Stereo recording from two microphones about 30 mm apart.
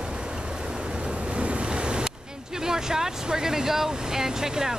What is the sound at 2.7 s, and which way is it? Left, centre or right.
Speech, centre.